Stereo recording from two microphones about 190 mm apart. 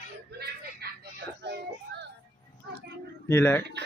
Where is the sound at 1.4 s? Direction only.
65° right (ahead or behind).